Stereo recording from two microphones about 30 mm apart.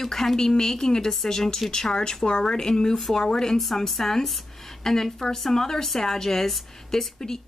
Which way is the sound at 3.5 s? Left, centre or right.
Centre.